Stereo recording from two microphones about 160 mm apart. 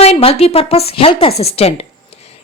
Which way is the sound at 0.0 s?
40° left (ahead or behind).